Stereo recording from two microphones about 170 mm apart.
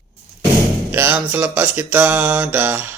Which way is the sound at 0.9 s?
10° right (ahead or behind).